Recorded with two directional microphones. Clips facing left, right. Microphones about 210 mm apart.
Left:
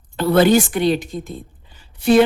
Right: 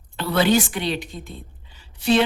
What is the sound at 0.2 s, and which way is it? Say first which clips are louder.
Speech: left 6 dB; 50° left (ahead or behind).